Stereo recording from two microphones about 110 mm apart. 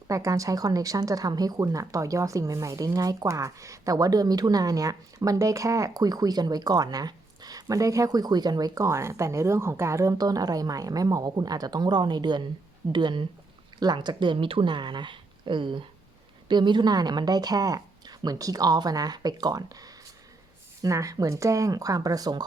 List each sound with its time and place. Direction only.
0.1 s speech: 30° right (ahead or behind)